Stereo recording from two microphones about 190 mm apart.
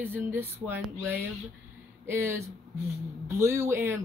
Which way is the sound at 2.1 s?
15° right (ahead or behind).